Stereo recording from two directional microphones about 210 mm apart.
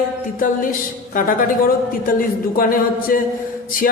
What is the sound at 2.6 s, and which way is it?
Speech, 40° left (ahead or behind).